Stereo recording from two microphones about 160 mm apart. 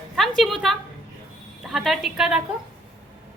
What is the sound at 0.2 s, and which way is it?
A woman's voice, centre (ahead or behind).